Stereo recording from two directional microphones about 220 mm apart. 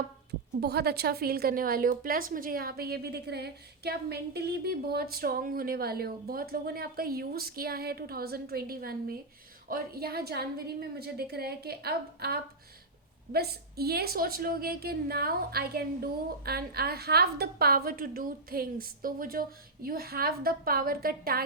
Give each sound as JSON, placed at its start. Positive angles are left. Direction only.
{"t": 0.6, "sound": "a woman's voice", "side_deg": -45}